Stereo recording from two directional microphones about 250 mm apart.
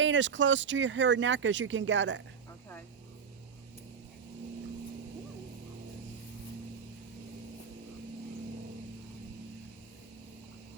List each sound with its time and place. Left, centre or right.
0.0 s speech: right